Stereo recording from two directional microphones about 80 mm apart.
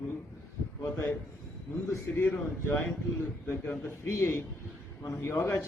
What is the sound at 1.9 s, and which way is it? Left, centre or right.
Speech, left.